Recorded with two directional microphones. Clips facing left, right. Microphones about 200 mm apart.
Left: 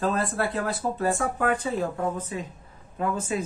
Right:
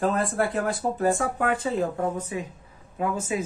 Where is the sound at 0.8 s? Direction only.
20° right (ahead or behind).